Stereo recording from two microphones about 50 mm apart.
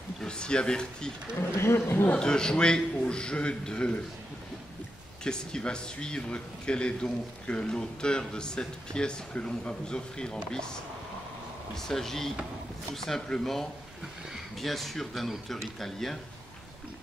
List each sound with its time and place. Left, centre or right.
0.2 s speech: centre
1.6 s speech: left
2.1 s speech: centre
5.2 s speech: centre